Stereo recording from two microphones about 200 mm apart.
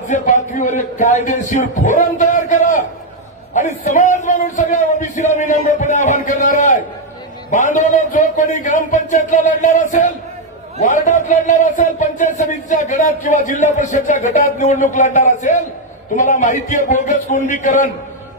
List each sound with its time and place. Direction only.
0.1 s a man's voice: 40° left (ahead or behind)